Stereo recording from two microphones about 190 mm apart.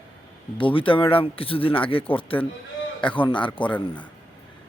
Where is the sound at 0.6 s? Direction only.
25° left (ahead or behind).